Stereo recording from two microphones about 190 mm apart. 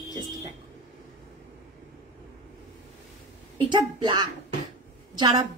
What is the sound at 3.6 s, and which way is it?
A woman's voice, 25° right (ahead or behind).